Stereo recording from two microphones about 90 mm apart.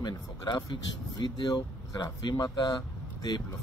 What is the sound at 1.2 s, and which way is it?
Speech, 55° left (ahead or behind).